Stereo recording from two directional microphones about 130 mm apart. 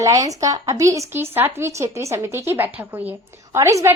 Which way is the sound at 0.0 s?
25° right (ahead or behind).